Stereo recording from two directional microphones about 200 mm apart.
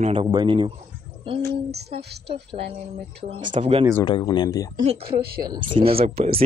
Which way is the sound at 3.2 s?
30° right (ahead or behind).